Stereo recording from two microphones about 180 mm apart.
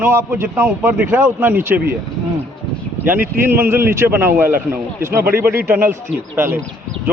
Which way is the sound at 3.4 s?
15° right (ahead or behind).